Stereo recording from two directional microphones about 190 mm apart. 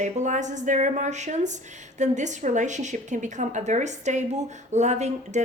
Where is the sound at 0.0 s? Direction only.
40° right (ahead or behind).